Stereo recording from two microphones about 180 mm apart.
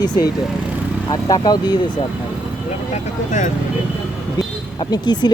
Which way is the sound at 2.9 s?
45° left (ahead or behind).